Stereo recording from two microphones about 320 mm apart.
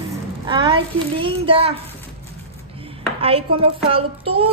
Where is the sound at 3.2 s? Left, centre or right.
Centre.